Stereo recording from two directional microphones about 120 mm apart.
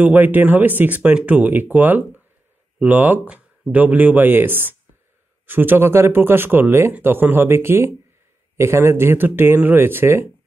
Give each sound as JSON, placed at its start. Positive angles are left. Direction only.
{"t": 0.0, "sound": "speech", "side_deg": -15}